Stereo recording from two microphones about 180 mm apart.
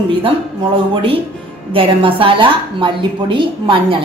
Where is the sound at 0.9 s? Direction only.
30° right (ahead or behind).